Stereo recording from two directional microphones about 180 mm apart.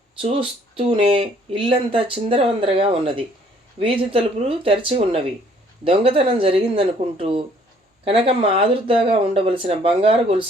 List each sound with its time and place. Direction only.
0.2 s speech: 30° right (ahead or behind)